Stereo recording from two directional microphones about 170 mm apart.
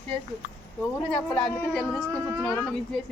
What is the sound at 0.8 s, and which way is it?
Speech, 5° left (ahead or behind).